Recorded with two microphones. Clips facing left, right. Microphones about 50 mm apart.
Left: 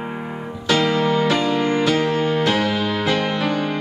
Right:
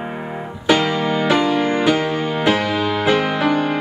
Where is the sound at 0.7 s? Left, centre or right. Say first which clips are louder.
Right 1 dB; centre.